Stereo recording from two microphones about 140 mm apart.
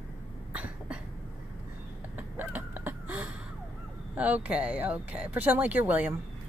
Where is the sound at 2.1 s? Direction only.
10° right (ahead or behind).